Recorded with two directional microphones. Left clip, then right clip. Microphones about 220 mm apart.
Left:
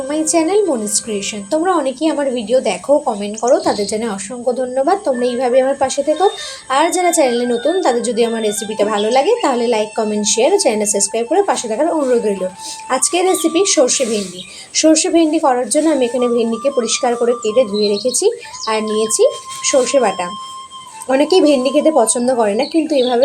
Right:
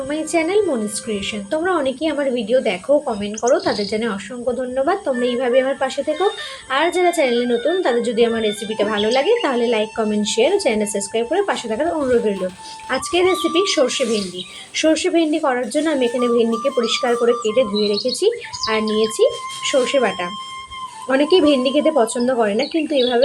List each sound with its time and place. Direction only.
0.1 s a woman's voice: 15° left (ahead or behind)